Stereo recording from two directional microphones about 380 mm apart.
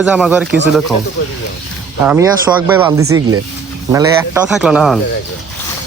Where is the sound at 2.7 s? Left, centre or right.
Centre.